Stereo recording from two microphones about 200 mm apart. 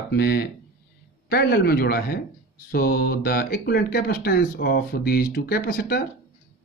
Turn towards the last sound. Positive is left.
turn(degrees=50)  # may be behind; listen again after turning